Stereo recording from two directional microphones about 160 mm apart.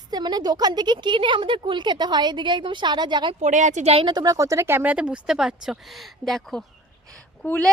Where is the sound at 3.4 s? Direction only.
50° right (ahead or behind).